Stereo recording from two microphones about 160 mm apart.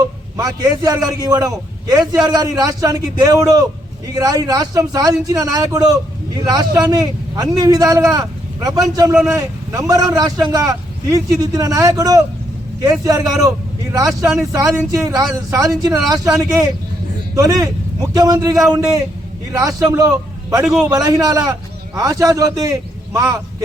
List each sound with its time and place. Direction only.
0.3 s a man's voice: 20° right (ahead or behind)
14.5 s a man's voice: 20° right (ahead or behind)